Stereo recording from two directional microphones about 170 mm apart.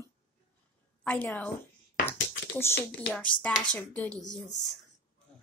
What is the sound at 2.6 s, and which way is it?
Speech, 15° left (ahead or behind).